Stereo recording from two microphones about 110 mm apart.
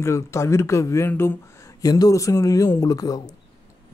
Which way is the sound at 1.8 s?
35° left (ahead or behind).